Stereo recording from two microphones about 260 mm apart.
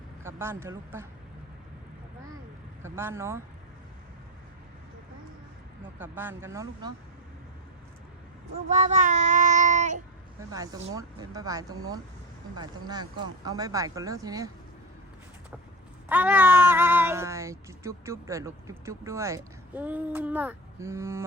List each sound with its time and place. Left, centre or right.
0.2 s speech: centre
2.8 s speech: centre
6.0 s speech: centre
8.7 s child singing: right
10.5 s speech: centre
16.0 s speech: centre